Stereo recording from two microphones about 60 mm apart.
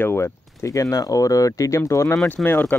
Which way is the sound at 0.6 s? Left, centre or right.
Left.